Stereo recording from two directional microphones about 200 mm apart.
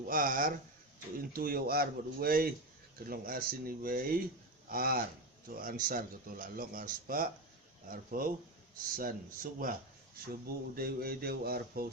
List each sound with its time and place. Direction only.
0.0 s speech: 45° right (ahead or behind)
10.8 s speech: 50° right (ahead or behind)